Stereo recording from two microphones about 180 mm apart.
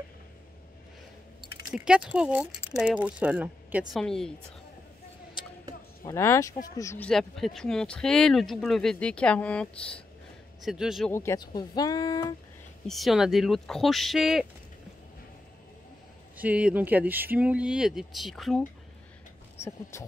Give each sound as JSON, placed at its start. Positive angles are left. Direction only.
{"t": 1.7, "sound": "speech", "side_deg": -5}
{"t": 6.0, "sound": "speech", "side_deg": 15}
{"t": 7.1, "sound": "speech", "side_deg": 0}
{"t": 11.1, "sound": "speech", "side_deg": 15}
{"t": 12.8, "sound": "speech", "side_deg": 0}
{"t": 16.3, "sound": "speech", "side_deg": -5}
{"t": 19.6, "sound": "speech", "side_deg": 15}